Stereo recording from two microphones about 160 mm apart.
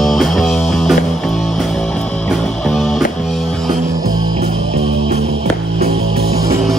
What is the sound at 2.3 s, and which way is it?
Music, centre (ahead or behind).